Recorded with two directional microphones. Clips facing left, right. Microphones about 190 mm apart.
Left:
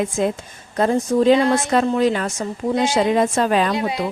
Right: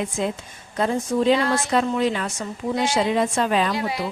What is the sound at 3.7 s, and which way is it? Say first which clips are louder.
Speech: left 4 dB; 20° left (ahead or behind).